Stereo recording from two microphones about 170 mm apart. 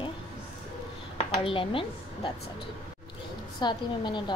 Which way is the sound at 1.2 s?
30° left (ahead or behind).